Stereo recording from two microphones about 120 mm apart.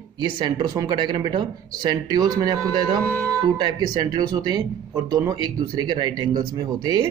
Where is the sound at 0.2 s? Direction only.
35° right (ahead or behind).